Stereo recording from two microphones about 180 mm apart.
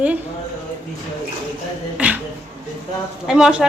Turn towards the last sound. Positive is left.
turn(degrees=-5)  # may be behind; listen again after turning